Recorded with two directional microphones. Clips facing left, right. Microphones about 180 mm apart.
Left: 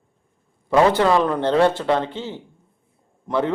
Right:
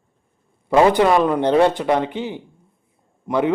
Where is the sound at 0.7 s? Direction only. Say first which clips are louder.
Right 2 dB; 15° right (ahead or behind).